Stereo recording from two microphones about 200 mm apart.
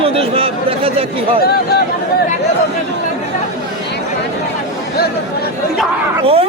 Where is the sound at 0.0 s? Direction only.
30° right (ahead or behind).